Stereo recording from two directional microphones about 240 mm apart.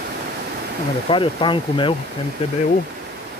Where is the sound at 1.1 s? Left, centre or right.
Left.